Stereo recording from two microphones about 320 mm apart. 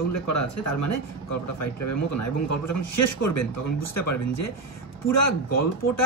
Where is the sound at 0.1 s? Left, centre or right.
Left.